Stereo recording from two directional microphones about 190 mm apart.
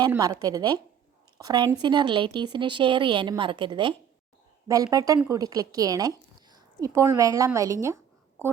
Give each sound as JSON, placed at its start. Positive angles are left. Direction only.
{"t": 0.1, "sound": "a woman's voice", "side_deg": -20}